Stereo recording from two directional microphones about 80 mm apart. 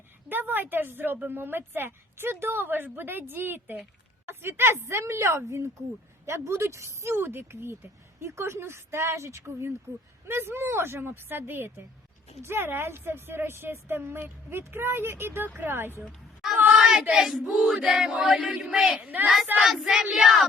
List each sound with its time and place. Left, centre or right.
0.3 s speech: right
16.7 s child singing: centre
17.0 s chant: centre
19.5 s a sound: centre